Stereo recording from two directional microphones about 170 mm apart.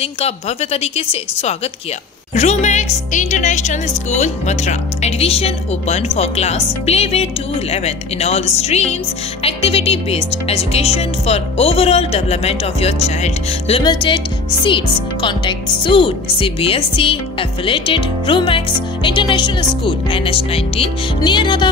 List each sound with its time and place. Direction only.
0.0 s speech: 40° left (ahead or behind)